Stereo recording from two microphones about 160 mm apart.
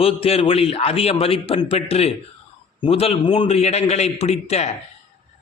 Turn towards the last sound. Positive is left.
turn(degrees=40)  # may be behind; listen again after turning